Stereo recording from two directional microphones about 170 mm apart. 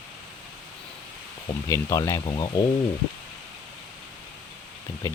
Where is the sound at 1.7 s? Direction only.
20° left (ahead or behind).